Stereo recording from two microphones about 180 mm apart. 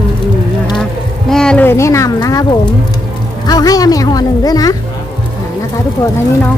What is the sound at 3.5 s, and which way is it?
Speech, 20° left (ahead or behind).